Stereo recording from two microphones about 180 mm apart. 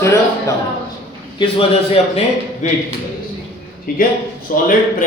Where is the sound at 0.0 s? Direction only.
15° left (ahead or behind).